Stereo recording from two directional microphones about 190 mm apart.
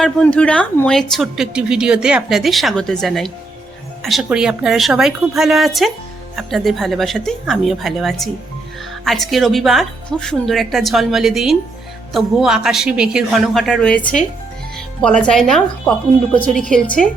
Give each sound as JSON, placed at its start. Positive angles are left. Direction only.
{"t": 0.0, "sound": "a woman's voice", "side_deg": 5}